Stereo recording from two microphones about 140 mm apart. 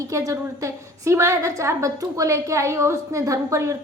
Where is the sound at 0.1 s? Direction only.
20° right (ahead or behind).